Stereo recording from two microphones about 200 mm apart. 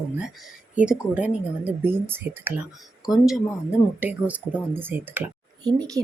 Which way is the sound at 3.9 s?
10° right (ahead or behind).